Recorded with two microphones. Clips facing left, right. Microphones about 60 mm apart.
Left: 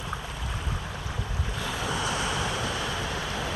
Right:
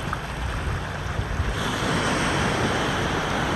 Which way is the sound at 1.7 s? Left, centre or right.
Right.